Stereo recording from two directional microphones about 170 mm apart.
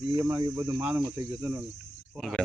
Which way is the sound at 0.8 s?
10° right (ahead or behind).